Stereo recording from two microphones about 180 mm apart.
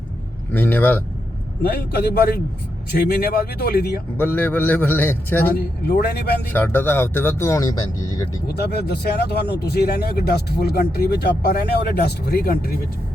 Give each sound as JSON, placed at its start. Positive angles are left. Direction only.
{"t": 0.5, "sound": "speech", "side_deg": 10}
{"t": 1.6, "sound": "speech", "side_deg": 60}
{"t": 4.2, "sound": "speech", "side_deg": 10}
{"t": 5.5, "sound": "speech", "side_deg": 60}
{"t": 6.5, "sound": "speech", "side_deg": 10}
{"t": 8.5, "sound": "speech", "side_deg": 60}